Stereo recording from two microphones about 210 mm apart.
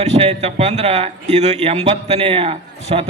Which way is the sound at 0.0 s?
30° right (ahead or behind).